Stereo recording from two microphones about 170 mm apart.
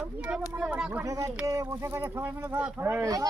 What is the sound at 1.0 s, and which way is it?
Speech, 20° right (ahead or behind).